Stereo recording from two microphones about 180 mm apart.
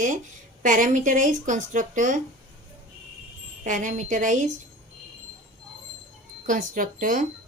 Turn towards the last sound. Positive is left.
turn(degrees=-50)  # may be behind; listen again after turning